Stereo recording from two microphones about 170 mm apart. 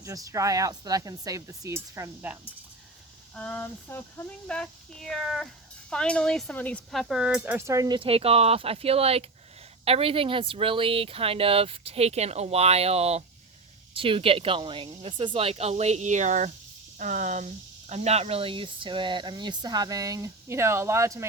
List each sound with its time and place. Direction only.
0.0 s speech: 20° right (ahead or behind)
3.3 s speech: 10° left (ahead or behind); by 21.2 s 15° right (ahead or behind)